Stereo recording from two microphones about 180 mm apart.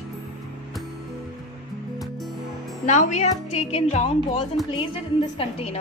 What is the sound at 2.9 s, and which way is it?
A woman's voice, 40° left (ahead or behind).